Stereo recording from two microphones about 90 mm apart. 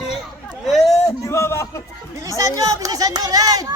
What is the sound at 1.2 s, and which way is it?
Speech, 30° left (ahead or behind).